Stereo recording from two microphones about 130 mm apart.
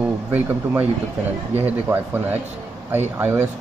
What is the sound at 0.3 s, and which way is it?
Speech, 15° right (ahead or behind).